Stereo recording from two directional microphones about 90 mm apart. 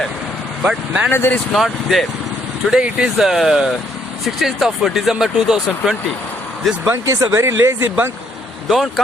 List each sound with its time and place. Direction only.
0.6 s speech: 10° right (ahead or behind)
1.1 s speech: 25° left (ahead or behind)
1.5 s speech: centre (ahead or behind)
2.6 s speech: 10° right (ahead or behind)
6.8 s speech: 30° right (ahead or behind)